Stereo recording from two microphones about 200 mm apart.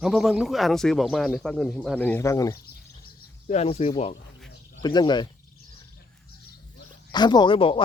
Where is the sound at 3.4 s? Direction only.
30° left (ahead or behind).